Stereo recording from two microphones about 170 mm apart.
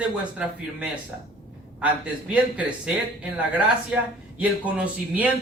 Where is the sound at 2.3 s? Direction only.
5° right (ahead or behind).